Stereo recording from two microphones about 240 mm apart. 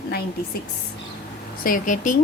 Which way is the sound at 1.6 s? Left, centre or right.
Left.